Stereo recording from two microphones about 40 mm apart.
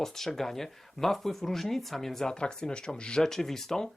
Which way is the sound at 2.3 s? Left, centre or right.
Left.